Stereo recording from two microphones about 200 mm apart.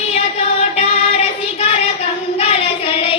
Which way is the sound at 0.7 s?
30° left (ahead or behind).